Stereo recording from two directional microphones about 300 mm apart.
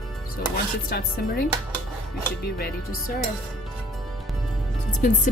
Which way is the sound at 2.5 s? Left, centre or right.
Left.